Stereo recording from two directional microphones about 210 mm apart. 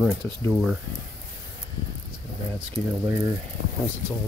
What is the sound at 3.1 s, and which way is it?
Speech, 15° right (ahead or behind).